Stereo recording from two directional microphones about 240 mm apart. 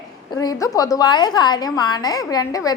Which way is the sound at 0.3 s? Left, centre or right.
Centre.